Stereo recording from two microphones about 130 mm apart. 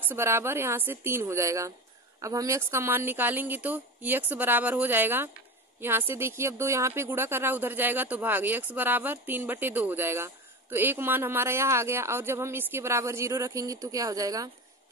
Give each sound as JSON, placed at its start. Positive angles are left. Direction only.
{"t": 0.1, "sound": "a woman's voice", "side_deg": -20}